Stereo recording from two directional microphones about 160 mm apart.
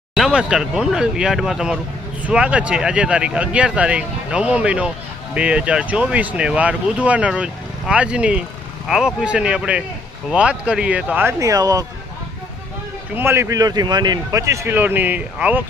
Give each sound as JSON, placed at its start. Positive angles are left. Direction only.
{"t": 0.1, "sound": "speech", "side_deg": -5}
{"t": 13.1, "sound": "speech", "side_deg": -15}